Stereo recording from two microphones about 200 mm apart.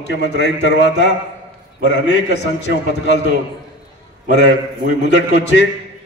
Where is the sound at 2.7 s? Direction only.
60° left (ahead or behind).